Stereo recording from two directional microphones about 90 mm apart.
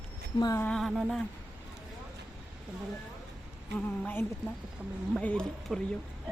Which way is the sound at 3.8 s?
20° left (ahead or behind).